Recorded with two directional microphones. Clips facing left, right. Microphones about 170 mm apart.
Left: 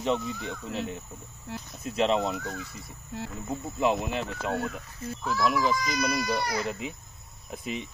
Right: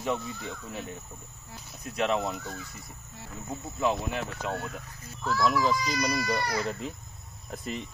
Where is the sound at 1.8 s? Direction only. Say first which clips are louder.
Left 3 dB; 25° left (ahead or behind).